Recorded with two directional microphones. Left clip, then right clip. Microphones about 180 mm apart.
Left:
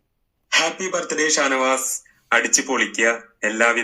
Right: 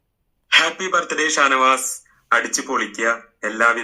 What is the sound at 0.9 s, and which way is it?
A man's voice, 30° left (ahead or behind).